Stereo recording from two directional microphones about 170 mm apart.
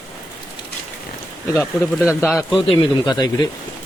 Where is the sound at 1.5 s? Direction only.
Centre (ahead or behind).